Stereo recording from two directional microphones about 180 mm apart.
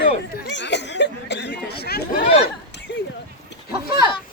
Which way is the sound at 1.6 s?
65° left (ahead or behind).